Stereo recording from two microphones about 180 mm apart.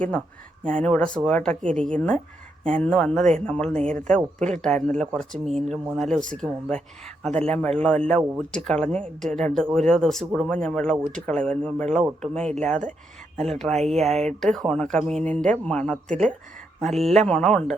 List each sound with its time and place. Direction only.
0.6 s speech: 5° left (ahead or behind)
13.7 s speech: 40° right (ahead or behind)
14.4 s speech: centre (ahead or behind)